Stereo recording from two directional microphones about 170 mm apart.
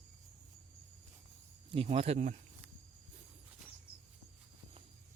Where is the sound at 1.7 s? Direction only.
35° right (ahead or behind).